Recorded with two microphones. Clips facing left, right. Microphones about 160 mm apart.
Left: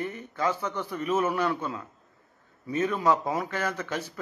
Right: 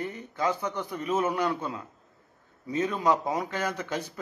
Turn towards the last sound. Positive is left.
turn(degrees=-15)  # may be behind; listen again after turning